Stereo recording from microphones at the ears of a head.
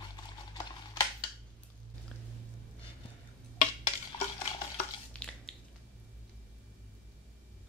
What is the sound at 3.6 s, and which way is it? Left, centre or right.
Stir, left.